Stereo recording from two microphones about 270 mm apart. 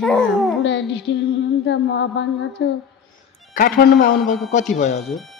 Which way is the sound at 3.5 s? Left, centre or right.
Left.